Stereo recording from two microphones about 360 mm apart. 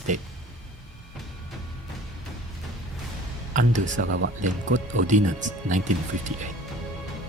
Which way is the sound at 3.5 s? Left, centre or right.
Right.